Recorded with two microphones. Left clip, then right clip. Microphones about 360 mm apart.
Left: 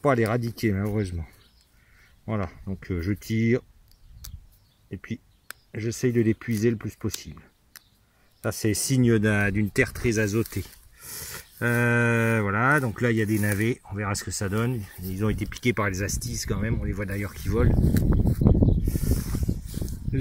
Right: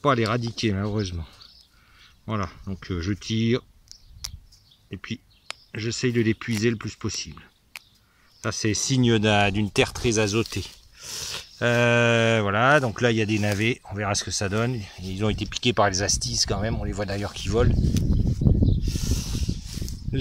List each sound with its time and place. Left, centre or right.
0.0 s speech: centre
4.8 s speech: centre
17.7 s a sound: left